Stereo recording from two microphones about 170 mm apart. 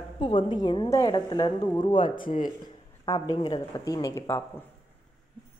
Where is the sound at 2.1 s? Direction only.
50° left (ahead or behind).